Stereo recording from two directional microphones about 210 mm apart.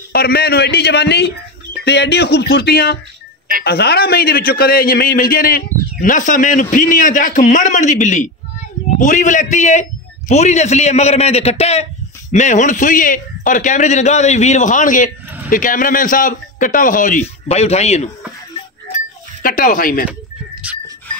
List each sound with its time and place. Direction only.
0.1 s a man's voice: 45° left (ahead or behind); by 18.1 s 30° left (ahead or behind)
19.4 s a man's voice: 40° left (ahead or behind)